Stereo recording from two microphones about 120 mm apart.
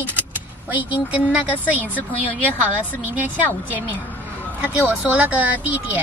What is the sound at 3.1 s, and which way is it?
Speech, 15° right (ahead or behind).